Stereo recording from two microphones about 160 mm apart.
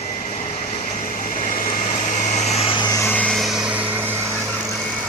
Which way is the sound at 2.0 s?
50° left (ahead or behind).